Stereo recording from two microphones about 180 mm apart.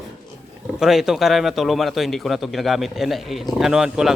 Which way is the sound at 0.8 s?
Centre (ahead or behind).